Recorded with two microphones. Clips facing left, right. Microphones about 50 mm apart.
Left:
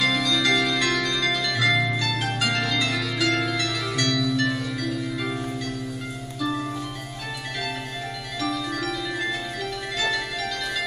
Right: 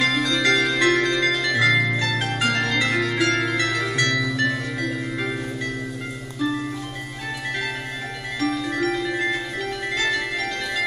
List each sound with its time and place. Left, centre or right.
0.0 s organ: right
2.1 s music: right
8.4 s music: right